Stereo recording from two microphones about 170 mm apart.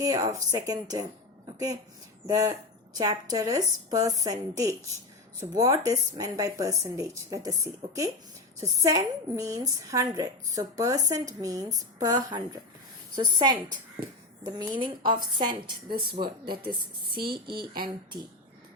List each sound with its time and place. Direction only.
0.0 s a woman's voice: 25° right (ahead or behind)
14.7 s a woman's voice: 30° right (ahead or behind)
16.2 s speech: 45° right (ahead or behind)
17.2 s a woman's voice: 30° right (ahead or behind)